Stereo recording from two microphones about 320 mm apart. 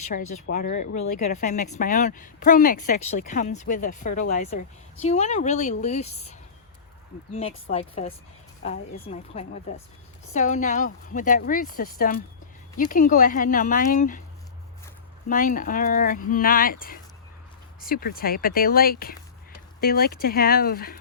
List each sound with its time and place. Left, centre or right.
0.5 s a woman's voice: left
7.3 s a woman's voice: centre
15.3 s a woman's voice: left